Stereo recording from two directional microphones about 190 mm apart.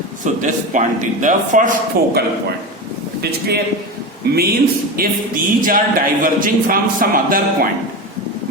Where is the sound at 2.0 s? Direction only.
55° right (ahead or behind).